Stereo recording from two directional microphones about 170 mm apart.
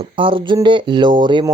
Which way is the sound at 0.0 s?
30° right (ahead or behind).